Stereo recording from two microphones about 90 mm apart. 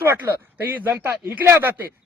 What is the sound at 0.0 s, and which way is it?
Speech, 25° right (ahead or behind).